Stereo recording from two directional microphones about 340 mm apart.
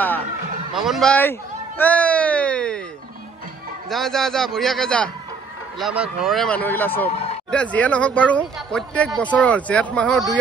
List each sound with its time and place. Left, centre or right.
0.7 s speech: centre
3.9 s speech: centre
7.1 s speech: centre
7.5 s speech: centre